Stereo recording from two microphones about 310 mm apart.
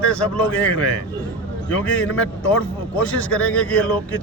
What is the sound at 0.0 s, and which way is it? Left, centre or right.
Speech, centre.